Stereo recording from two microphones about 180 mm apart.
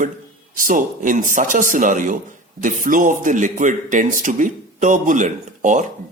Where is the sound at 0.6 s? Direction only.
45° right (ahead or behind).